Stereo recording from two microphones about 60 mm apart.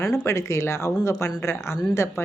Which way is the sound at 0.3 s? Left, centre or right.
Left.